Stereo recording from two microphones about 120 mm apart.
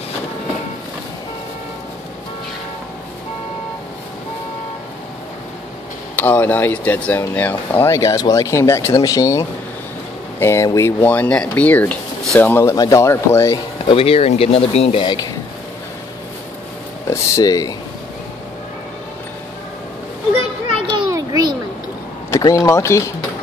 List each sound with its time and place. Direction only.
6.1 s speech: 15° left (ahead or behind)
12.7 s speech: 30° left (ahead or behind)
13.8 s speech: 50° left (ahead or behind)
17.1 s speech: 30° left (ahead or behind)
20.7 s children playing: 45° right (ahead or behind)
21.1 s a sound: 30° right (ahead or behind)
22.3 s speech: 25° left (ahead or behind)